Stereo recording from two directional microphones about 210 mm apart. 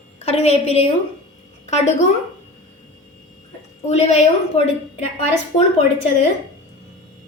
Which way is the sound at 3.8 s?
30° left (ahead or behind).